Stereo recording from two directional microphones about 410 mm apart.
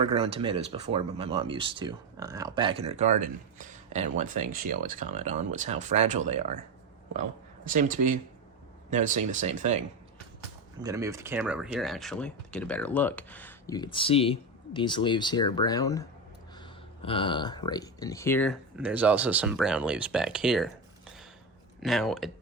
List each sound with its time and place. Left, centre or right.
0.0 s speech: centre
7.7 s speech: centre
21.8 s speech: centre